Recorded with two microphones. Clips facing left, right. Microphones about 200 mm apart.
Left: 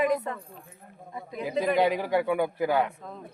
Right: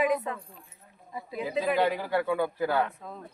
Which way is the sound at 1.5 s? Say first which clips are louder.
Left 2 dB; 15° left (ahead or behind).